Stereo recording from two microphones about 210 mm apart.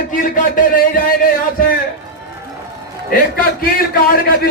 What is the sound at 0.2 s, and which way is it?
Speech, 40° left (ahead or behind).